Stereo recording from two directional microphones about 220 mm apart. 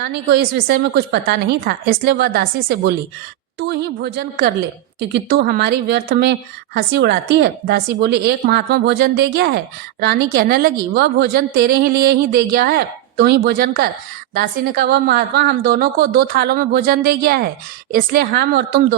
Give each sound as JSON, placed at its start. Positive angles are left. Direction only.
{"t": 0.0, "sound": "a woman's voice", "side_deg": -50}